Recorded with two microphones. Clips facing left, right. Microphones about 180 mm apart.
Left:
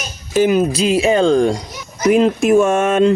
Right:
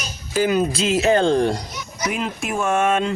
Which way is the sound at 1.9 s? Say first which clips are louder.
Left 13 dB; 50° left (ahead or behind).